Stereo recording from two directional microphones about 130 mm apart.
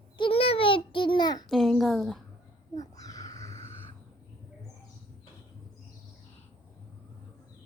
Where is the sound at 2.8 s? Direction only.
25° left (ahead or behind).